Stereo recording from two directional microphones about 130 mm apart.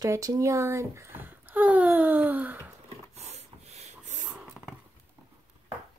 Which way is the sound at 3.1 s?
55° right (ahead or behind).